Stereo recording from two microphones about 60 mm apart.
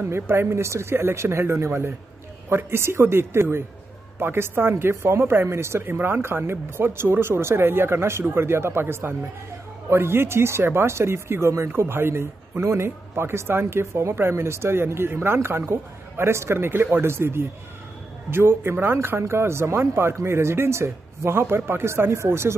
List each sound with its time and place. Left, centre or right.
0.1 s speech: right